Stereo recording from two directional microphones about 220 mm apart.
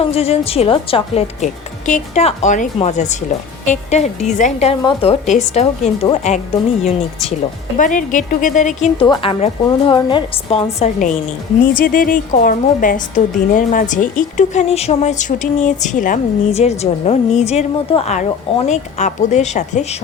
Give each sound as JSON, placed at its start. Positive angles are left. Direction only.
{"t": 0.0, "sound": "a woman's voice", "side_deg": 25}
{"t": 7.8, "sound": "a woman's voice", "side_deg": 35}